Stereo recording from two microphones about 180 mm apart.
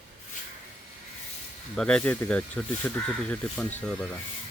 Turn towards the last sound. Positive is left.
turn(degrees=5)  # may be behind; listen again after turning